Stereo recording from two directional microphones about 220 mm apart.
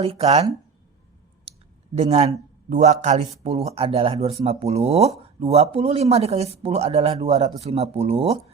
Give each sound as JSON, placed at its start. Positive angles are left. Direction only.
{"t": 0.0, "sound": "speech", "side_deg": -30}
{"t": 2.0, "sound": "speech", "side_deg": -30}